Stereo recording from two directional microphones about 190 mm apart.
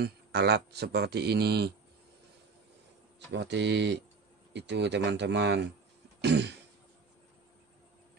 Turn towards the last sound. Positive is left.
turn(degrees=-65)  # may be behind; listen again after turning